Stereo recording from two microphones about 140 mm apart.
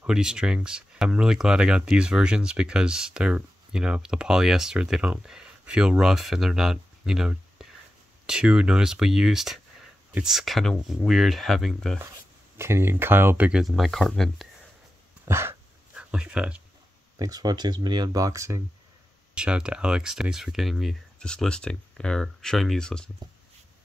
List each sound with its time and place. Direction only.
0.0 s speech: 5° right (ahead or behind)
12.5 s speech: 20° right (ahead or behind); by 14.5 s centre (ahead or behind)
15.2 s a sound: 15° right (ahead or behind)
17.2 s speech: 30° right (ahead or behind)
19.3 s speech: 5° right (ahead or behind)